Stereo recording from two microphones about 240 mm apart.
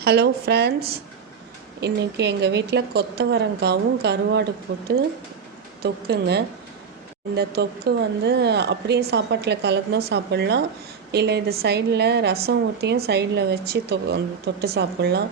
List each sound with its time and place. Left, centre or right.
0.0 s a woman's voice: right